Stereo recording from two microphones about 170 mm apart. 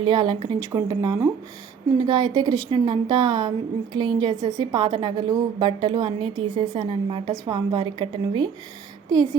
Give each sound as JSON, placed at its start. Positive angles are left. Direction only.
{"t": 0.0, "sound": "a woman's voice", "side_deg": -25}